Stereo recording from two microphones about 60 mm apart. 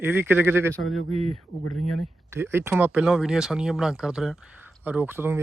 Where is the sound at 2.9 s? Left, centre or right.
Centre.